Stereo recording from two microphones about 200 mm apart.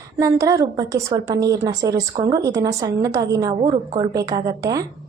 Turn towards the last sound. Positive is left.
turn(degrees=-20)  # may be behind; listen again after turning